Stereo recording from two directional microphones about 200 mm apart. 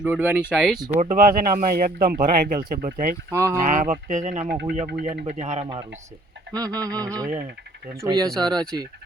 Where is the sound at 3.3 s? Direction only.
15° right (ahead or behind).